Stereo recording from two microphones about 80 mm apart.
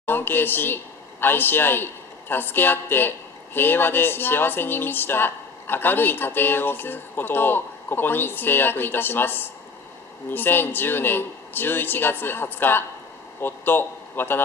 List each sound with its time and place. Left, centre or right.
0.0 s a man's voice: left